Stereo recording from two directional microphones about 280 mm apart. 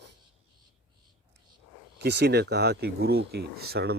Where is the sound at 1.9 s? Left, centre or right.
Right.